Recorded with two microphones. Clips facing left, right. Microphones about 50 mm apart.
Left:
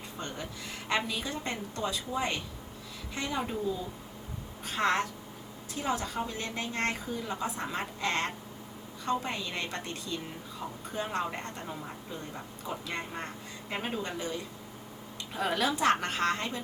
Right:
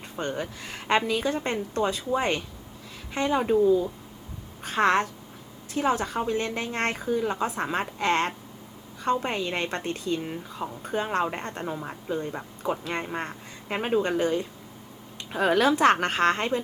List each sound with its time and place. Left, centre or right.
0.2 s a woman's voice: right
4.6 s a woman's voice: right
14.0 s a woman's voice: right